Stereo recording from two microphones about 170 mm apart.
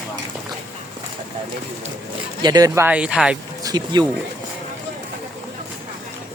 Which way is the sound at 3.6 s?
25° right (ahead or behind).